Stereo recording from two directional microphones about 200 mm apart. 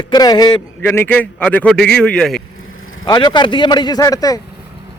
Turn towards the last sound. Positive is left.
turn(degrees=20)  # may be behind; listen again after turning